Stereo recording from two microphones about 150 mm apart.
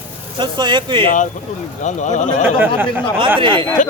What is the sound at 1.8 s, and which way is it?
Speech, 55° left (ahead or behind).